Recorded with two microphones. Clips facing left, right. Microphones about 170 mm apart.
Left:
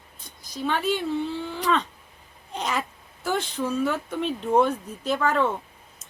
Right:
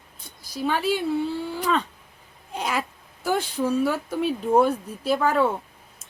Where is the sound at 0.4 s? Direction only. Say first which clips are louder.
Right 1 dB; 10° right (ahead or behind).